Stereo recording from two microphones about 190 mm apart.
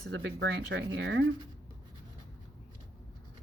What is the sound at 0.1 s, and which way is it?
Speech, 70° right (ahead or behind).